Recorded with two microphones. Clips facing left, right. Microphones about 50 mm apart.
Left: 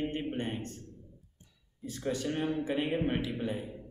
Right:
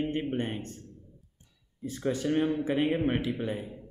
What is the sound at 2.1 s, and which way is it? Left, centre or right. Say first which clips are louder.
A man's voice: right 5 dB; right.